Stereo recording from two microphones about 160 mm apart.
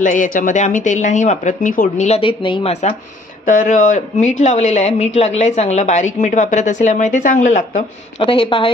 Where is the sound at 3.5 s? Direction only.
55° left (ahead or behind).